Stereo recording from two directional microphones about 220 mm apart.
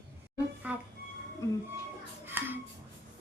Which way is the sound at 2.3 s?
10° right (ahead or behind).